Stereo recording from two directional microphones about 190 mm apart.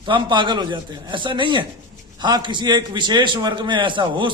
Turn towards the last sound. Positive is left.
turn(degrees=-25)  # may be behind; listen again after turning